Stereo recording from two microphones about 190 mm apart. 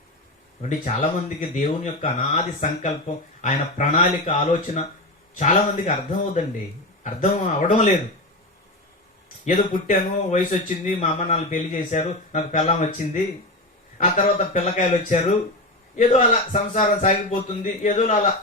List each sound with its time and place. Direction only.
0.6 s speech: 40° left (ahead or behind)
7.0 s speech: 40° left (ahead or behind)
9.4 s speech: 40° left (ahead or behind)